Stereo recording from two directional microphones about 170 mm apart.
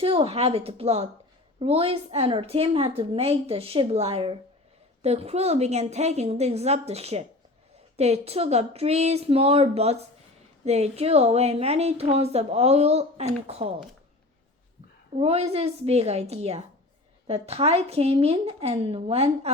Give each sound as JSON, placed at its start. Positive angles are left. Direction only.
{"t": 0.0, "sound": "a woman's voice", "side_deg": -35}
{"t": 15.1, "sound": "a woman's voice", "side_deg": -35}